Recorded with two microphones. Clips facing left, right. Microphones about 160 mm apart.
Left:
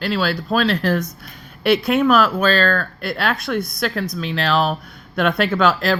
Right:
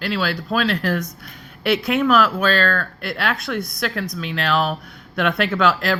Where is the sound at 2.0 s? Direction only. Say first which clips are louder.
Even; 25° left (ahead or behind).